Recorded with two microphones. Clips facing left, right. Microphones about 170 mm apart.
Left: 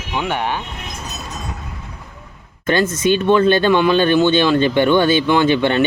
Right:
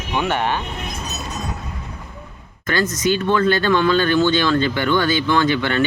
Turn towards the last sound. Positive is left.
turn(degrees=20)  # may be behind; listen again after turning